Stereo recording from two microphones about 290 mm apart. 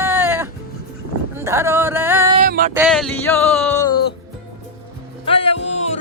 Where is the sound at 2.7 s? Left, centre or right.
Centre.